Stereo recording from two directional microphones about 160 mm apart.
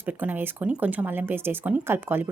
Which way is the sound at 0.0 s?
10° right (ahead or behind).